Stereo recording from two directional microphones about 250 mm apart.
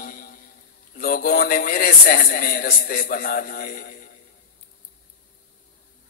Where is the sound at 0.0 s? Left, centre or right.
Left.